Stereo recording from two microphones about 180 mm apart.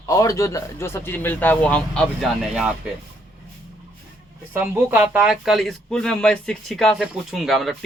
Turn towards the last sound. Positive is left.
turn(degrees=0)  # may be behind; listen again after turning